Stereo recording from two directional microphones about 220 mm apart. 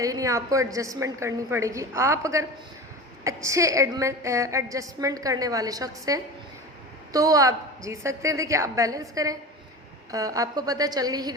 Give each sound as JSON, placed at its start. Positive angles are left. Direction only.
{"t": 0.0, "sound": "a woman's voice", "side_deg": -15}